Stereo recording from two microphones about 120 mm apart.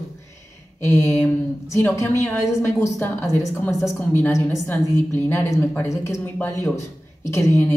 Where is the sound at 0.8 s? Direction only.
25° left (ahead or behind).